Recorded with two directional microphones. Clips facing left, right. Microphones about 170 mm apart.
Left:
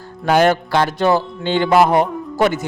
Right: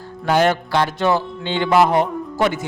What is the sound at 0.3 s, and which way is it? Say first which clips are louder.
A man's voice: left 3 dB; 50° left (ahead or behind).